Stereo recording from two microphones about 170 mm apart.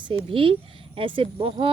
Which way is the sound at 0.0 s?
30° right (ahead or behind).